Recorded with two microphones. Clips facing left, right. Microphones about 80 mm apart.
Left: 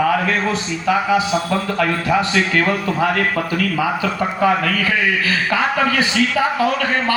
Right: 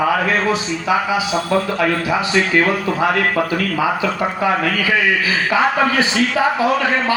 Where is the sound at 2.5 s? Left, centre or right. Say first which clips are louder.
Right 1 dB; centre.